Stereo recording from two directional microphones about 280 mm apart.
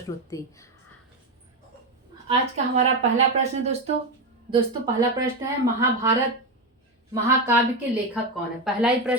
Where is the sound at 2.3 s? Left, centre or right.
Right.